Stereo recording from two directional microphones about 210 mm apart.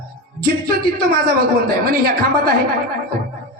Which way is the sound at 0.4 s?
45° right (ahead or behind).